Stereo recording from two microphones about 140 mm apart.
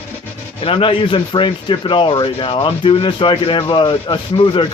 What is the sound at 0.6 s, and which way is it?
Speech, 40° left (ahead or behind).